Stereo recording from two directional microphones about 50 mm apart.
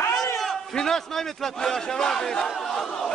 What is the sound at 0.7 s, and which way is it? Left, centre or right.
Battle cry, centre.